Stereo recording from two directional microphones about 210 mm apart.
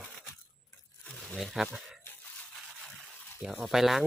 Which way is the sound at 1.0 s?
5° left (ahead or behind).